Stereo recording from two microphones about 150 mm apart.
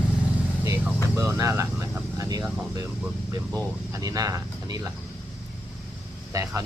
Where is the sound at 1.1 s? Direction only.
20° right (ahead or behind).